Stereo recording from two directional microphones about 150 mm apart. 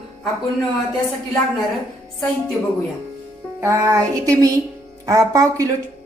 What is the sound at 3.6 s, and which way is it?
A woman's voice, 20° right (ahead or behind).